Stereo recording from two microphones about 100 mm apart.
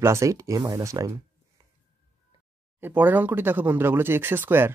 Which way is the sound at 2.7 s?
20° right (ahead or behind).